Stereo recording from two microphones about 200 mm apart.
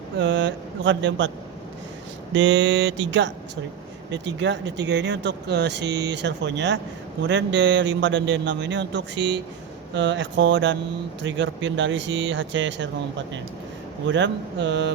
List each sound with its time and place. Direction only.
0.2 s speech: 65° right (ahead or behind)
2.3 s speech: 65° right (ahead or behind)